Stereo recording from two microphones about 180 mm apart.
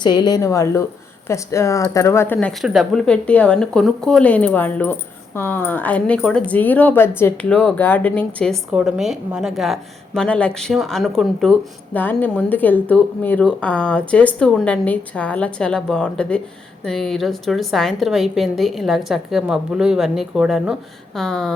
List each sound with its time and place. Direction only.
0.0 s a woman's voice: 25° left (ahead or behind); by 21.5 s centre (ahead or behind)